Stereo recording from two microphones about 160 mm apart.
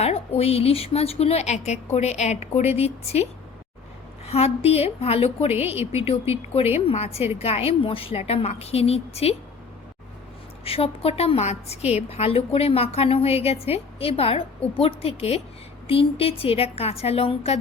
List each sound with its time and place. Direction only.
0.0 s a woman's voice: 40° left (ahead or behind)
4.3 s a woman's voice: 40° left (ahead or behind)
10.6 s a woman's voice: 35° left (ahead or behind)